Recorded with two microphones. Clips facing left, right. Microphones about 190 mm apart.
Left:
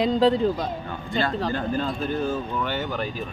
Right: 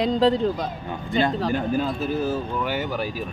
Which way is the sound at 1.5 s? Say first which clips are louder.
Right 3 dB; 10° right (ahead or behind).